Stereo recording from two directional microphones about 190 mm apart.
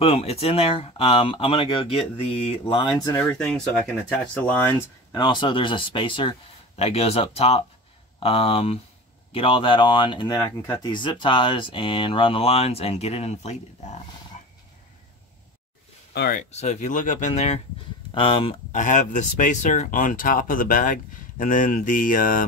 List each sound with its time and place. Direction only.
0.0 s speech: 30° left (ahead or behind); by 3.3 s 15° left (ahead or behind)
3.4 s speech: centre (ahead or behind)
5.1 s speech: 25° left (ahead or behind)
16.1 s speech: 55° left (ahead or behind)
16.5 s speech: 35° left (ahead or behind)
18.7 s speech: 40° left (ahead or behind)